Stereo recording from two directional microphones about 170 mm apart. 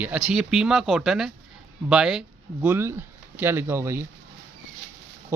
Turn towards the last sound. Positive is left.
turn(degrees=-15)  # may be behind; listen again after turning